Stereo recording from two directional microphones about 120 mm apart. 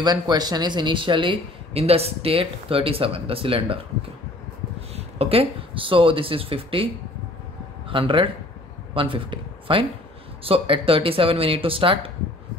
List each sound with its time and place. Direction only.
0.0 s speech: 35° right (ahead or behind)
4.9 s speech: 55° right (ahead or behind)
7.9 s speech: 45° right (ahead or behind)